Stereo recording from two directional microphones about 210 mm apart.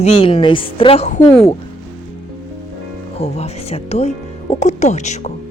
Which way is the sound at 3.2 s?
30° left (ahead or behind).